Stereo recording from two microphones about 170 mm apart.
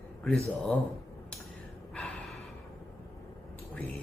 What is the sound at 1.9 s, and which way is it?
Gasp, centre (ahead or behind).